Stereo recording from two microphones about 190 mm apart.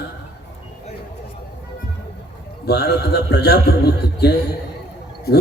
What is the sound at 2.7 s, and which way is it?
A man's voice, 55° left (ahead or behind).